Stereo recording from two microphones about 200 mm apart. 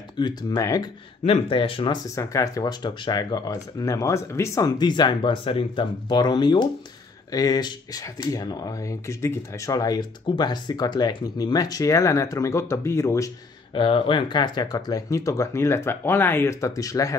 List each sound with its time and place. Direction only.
0.2 s speech: 20° left (ahead or behind)
1.2 s speech: 30° left (ahead or behind)
2.1 s speech: 15° left (ahead or behind)
13.7 s speech: 25° left (ahead or behind)